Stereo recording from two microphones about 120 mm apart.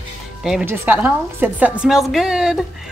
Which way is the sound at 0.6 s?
20° right (ahead or behind).